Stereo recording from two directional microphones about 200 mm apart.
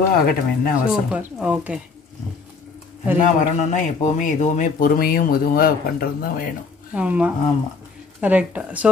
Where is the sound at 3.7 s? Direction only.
40° left (ahead or behind).